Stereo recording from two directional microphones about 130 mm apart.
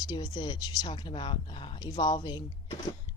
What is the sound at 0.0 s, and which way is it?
A woman's voice, 35° left (ahead or behind).